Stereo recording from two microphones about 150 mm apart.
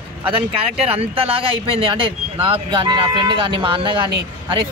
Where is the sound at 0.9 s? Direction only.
40° right (ahead or behind).